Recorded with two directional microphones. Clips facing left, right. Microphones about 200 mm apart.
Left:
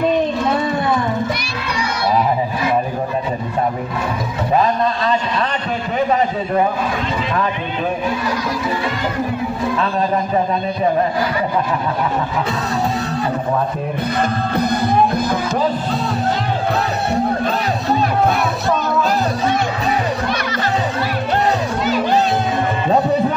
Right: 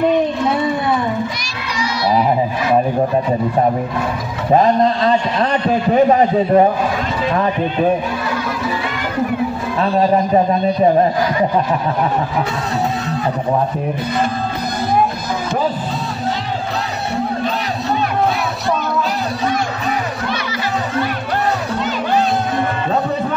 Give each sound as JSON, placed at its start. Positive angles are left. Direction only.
{"t": 4.6, "sound": "a man's voice", "side_deg": -40}